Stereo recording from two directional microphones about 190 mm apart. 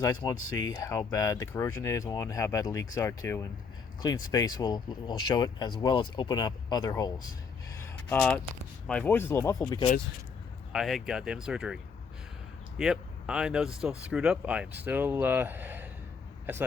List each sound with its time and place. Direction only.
0.0 s speech: 20° left (ahead or behind)
8.9 s speech: 10° left (ahead or behind)
10.7 s speech: centre (ahead or behind)
12.8 s speech: 5° right (ahead or behind)